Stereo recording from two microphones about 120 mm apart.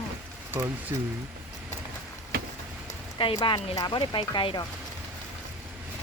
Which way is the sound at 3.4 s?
35° left (ahead or behind).